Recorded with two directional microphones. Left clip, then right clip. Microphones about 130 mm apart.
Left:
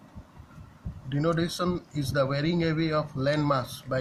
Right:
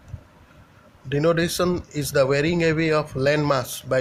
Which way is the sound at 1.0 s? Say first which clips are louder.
Right 7 dB; 40° right (ahead or behind).